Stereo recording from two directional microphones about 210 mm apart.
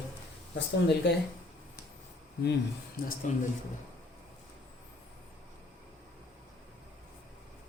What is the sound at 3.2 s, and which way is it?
Speech, 35° left (ahead or behind).